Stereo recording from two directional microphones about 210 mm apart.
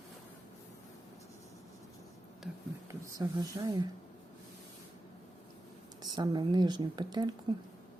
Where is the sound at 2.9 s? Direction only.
15° right (ahead or behind).